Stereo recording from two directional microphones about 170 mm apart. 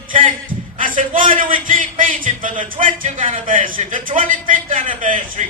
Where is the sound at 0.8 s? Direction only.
50° right (ahead or behind).